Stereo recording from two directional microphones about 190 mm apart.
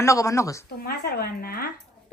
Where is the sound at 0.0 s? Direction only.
15° left (ahead or behind).